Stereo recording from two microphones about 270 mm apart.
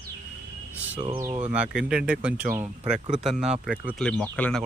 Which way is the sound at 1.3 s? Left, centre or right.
Right.